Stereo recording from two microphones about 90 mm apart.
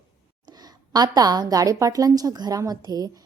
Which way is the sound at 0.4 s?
45° right (ahead or behind).